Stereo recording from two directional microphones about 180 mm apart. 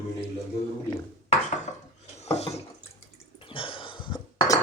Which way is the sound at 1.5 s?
40° left (ahead or behind).